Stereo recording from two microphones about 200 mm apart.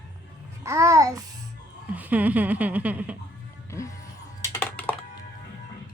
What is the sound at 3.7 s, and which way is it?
Music, 15° left (ahead or behind).